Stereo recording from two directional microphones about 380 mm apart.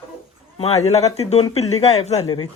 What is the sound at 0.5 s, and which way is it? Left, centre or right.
Speech, centre.